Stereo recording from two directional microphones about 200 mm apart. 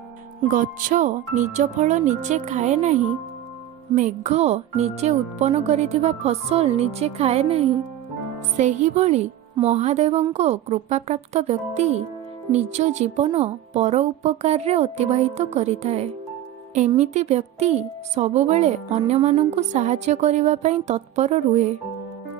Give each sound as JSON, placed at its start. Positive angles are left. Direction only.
{"t": 0.5, "sound": "a woman's voice", "side_deg": -40}